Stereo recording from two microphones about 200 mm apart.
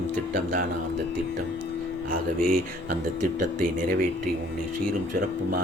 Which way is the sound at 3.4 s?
40° right (ahead or behind).